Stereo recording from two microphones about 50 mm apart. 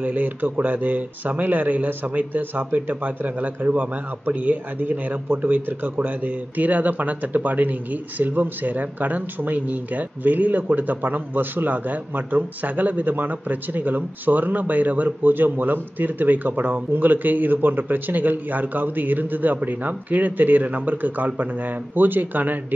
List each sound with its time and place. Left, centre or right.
0.0 s speech: right